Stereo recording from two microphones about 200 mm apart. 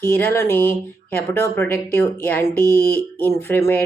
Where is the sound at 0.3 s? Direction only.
10° left (ahead or behind).